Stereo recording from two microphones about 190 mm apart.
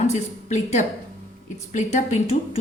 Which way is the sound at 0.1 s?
40° left (ahead or behind).